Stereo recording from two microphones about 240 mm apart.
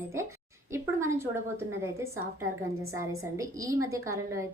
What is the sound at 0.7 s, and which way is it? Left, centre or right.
Speech, centre.